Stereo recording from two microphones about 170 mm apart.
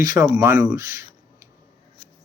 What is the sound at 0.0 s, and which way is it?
Speech, 20° right (ahead or behind).